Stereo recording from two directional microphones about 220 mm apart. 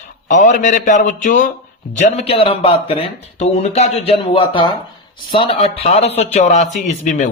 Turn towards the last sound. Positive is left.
turn(degrees=30)  # may be behind; listen again after turning